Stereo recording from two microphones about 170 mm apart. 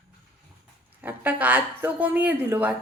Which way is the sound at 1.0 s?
10° right (ahead or behind).